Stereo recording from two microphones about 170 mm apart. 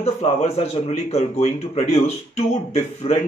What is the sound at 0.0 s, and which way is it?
Speech, 40° left (ahead or behind).